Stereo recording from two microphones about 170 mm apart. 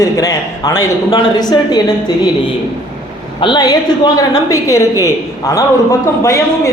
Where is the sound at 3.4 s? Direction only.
25° left (ahead or behind).